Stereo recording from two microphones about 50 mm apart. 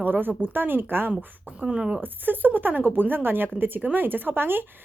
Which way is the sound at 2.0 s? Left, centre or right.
Right.